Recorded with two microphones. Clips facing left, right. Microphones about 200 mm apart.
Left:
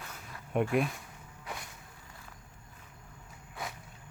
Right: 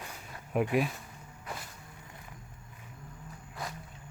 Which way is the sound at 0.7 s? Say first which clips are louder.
Even; centre (ahead or behind).